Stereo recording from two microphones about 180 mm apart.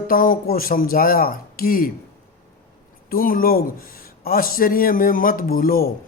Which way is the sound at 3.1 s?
50° left (ahead or behind).